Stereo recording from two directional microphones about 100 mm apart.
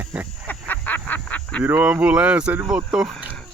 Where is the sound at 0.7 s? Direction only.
15° left (ahead or behind).